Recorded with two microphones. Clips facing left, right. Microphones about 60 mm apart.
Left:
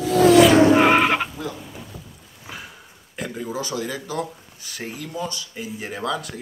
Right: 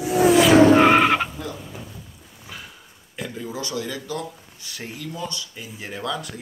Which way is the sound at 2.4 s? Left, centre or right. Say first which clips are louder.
Left 2 dB; centre.